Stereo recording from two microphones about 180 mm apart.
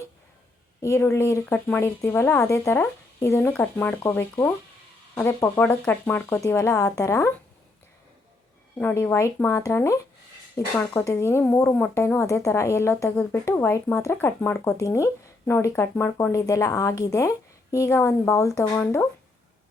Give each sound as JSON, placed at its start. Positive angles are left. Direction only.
{"t": 0.8, "sound": "speech", "side_deg": 15}
{"t": 8.8, "sound": "speech", "side_deg": 10}